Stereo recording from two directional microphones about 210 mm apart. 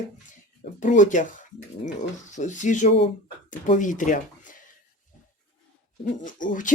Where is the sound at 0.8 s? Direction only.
35° left (ahead or behind).